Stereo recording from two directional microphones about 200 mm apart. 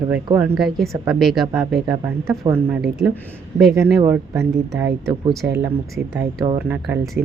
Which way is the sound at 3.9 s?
10° right (ahead or behind).